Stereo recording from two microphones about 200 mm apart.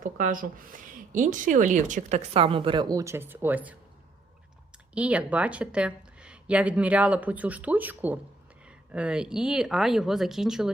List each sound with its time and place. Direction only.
0.0 s speech: 40° right (ahead or behind); by 3.8 s 10° right (ahead or behind)
4.9 s a woman's voice: 5° right (ahead or behind)